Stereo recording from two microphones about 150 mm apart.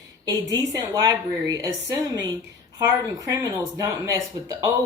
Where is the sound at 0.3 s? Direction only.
25° right (ahead or behind).